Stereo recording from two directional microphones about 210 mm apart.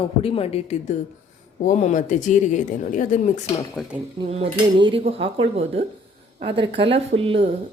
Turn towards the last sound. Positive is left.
turn(degrees=-25)  # may be behind; listen again after turning